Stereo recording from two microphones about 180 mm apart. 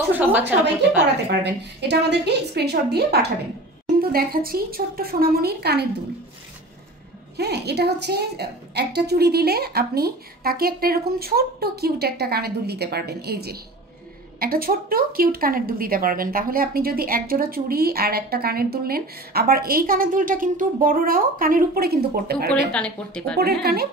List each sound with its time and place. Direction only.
0.1 s a sound: 10° right (ahead or behind)
0.9 s a woman's voice: 70° right (ahead or behind)
7.3 s a woman's voice: 65° right (ahead or behind)
22.7 s speech: 5° left (ahead or behind)
23.6 s a woman's voice: 60° right (ahead or behind)